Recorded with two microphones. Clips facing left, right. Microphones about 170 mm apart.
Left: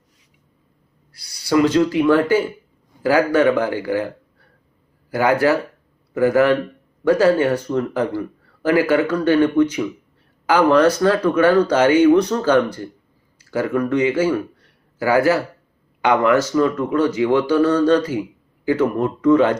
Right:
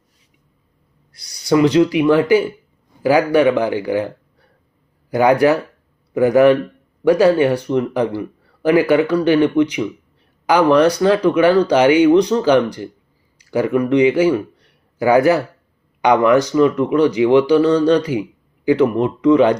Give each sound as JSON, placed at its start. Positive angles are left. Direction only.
{"t": 1.3, "sound": "speech", "side_deg": -20}
{"t": 5.1, "sound": "speech", "side_deg": -20}
{"t": 14.6, "sound": "a sound", "side_deg": -15}
{"t": 16.0, "sound": "speech", "side_deg": -15}